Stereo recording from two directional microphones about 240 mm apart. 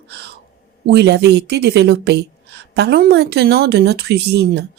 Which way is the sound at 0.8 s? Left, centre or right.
Right.